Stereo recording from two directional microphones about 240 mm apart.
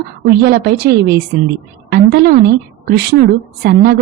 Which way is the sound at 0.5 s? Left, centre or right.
Right.